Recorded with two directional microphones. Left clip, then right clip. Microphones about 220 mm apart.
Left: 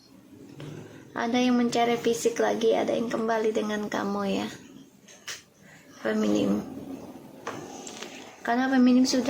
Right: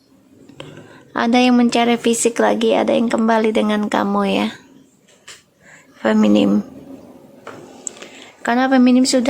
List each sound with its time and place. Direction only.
1.1 s speech: 45° right (ahead or behind)
6.0 s speech: 45° right (ahead or behind)
8.4 s speech: 45° right (ahead or behind)